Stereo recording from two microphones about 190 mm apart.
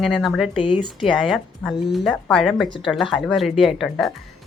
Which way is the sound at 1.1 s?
Centre (ahead or behind).